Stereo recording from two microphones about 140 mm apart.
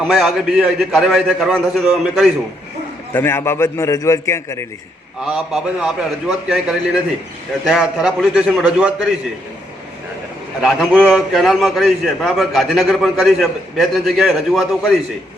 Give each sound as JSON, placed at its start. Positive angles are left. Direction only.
{"t": 0.0, "sound": "a man's voice", "side_deg": 0}
{"t": 3.1, "sound": "a man's voice", "side_deg": 15}
{"t": 5.2, "sound": "a man's voice", "side_deg": -5}
{"t": 10.6, "sound": "a man's voice", "side_deg": -5}